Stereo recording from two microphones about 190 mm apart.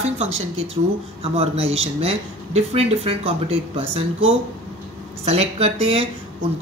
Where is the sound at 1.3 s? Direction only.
30° right (ahead or behind).